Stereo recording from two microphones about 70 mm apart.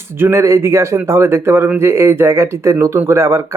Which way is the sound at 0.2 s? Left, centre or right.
Right.